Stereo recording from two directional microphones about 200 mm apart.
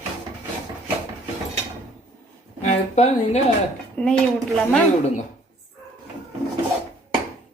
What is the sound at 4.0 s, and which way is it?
Speech, 5° left (ahead or behind).